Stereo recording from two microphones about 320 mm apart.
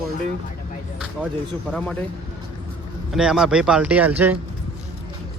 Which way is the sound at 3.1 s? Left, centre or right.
Centre.